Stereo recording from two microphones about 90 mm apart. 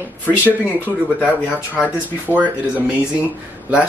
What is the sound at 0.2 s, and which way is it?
Speech, 20° left (ahead or behind).